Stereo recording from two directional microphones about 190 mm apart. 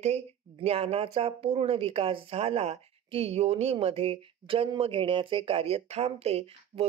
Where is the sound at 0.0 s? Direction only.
35° right (ahead or behind).